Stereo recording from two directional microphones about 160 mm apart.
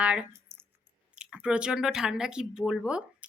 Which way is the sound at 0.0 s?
5° right (ahead or behind).